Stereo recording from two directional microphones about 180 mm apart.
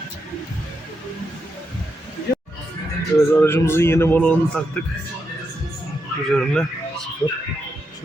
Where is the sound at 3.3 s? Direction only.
10° left (ahead or behind).